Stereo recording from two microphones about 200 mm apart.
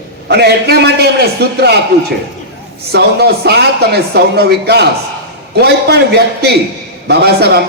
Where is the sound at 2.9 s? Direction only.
55° right (ahead or behind).